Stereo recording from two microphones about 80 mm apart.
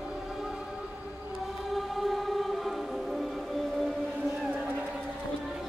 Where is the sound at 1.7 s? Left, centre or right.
Centre.